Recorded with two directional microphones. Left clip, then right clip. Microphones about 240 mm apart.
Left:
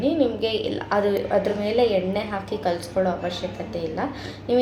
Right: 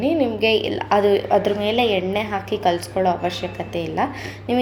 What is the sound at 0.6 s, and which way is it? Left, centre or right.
Speech, right.